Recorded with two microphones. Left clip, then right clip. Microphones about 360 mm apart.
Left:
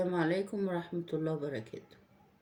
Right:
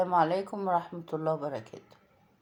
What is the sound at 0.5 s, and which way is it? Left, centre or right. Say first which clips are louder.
Speech: right 7 dB; right.